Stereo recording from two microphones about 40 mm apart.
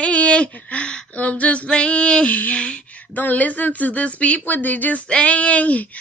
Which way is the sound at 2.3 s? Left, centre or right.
Left.